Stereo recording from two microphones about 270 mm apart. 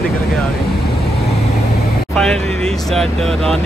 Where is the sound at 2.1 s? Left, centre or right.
Centre.